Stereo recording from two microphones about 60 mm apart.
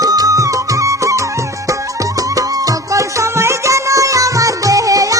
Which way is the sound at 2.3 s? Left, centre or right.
Right.